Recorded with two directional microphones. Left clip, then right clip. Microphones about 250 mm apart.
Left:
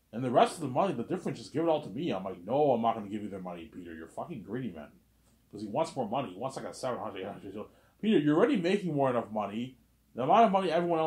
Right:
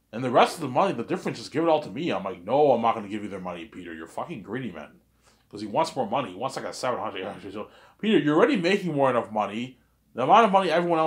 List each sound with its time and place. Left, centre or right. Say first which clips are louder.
0.1 s speech: right 5 dB; centre